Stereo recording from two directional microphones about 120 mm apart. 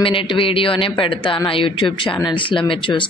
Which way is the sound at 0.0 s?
45° left (ahead or behind).